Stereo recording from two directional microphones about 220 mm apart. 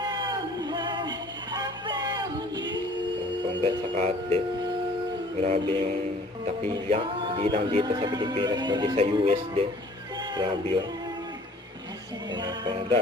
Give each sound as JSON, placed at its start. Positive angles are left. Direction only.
{"t": 0.0, "sound": "a sound", "side_deg": -20}
{"t": 1.5, "sound": "music", "side_deg": -20}
{"t": 5.4, "sound": "music", "side_deg": -25}
{"t": 12.3, "sound": "music", "side_deg": -20}